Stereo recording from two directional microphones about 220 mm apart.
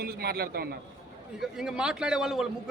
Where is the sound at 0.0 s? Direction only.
45° right (ahead or behind).